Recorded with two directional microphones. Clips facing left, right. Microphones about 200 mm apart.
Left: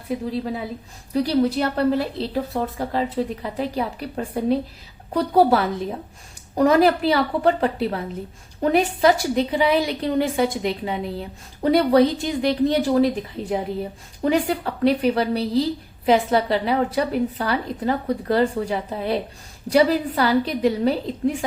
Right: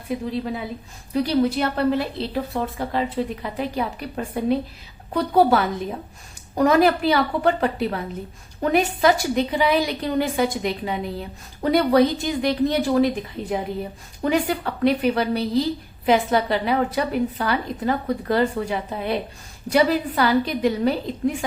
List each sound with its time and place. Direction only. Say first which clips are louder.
0.1 s a woman's voice: left 1 dB; 35° left (ahead or behind)